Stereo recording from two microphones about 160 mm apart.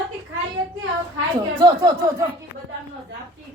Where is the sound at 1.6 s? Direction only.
25° right (ahead or behind).